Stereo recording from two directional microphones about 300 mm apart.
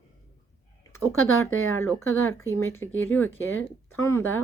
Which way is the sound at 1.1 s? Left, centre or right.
Left.